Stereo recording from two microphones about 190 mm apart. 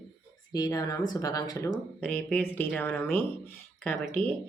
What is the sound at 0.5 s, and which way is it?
Speech, 20° left (ahead or behind).